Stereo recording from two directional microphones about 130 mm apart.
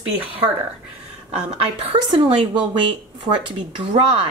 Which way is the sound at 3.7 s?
40° right (ahead or behind).